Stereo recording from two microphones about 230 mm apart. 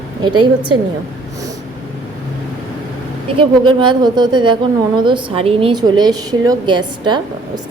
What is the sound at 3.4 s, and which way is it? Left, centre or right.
A woman's voice, right.